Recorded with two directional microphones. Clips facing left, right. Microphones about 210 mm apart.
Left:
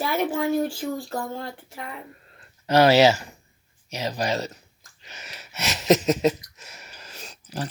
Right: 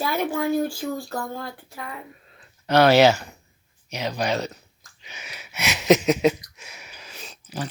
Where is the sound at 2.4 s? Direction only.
5° left (ahead or behind).